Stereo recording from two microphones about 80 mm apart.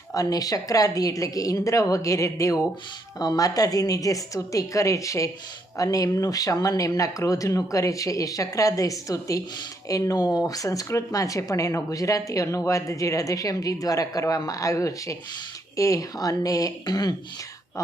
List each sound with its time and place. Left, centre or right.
0.1 s speech: left